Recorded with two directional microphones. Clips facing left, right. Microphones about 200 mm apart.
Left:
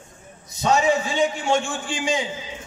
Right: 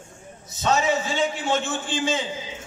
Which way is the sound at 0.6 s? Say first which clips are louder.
Left 3 dB; 15° left (ahead or behind).